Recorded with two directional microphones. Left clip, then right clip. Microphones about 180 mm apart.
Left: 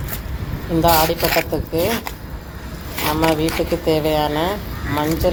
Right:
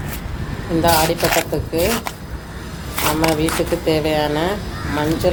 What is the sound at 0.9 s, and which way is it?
Speech, 10° left (ahead or behind).